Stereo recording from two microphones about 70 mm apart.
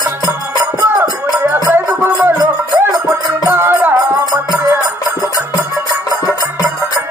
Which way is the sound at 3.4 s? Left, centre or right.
Right.